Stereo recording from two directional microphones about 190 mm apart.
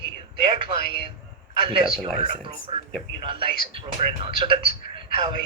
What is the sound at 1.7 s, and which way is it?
Speech, 25° right (ahead or behind).